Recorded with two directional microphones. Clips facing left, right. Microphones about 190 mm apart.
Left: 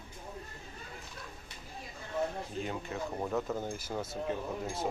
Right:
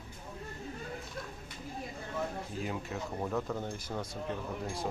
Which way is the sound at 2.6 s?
Centre (ahead or behind).